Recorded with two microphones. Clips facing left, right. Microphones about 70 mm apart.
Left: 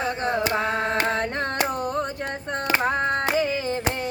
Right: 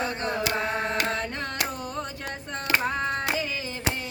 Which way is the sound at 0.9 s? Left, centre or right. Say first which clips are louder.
Left 4 dB; left.